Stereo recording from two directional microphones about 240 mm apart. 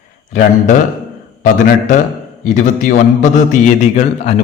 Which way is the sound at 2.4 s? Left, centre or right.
Left.